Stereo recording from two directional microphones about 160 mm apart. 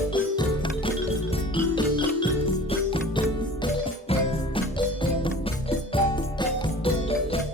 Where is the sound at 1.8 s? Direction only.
30° left (ahead or behind).